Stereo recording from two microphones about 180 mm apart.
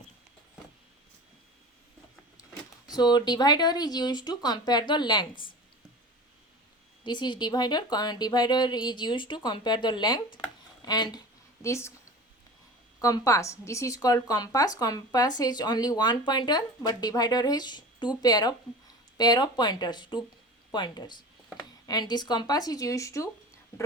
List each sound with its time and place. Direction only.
2.9 s speech: 25° left (ahead or behind)
7.0 s a woman's voice: 25° left (ahead or behind)
13.0 s speech: 20° left (ahead or behind)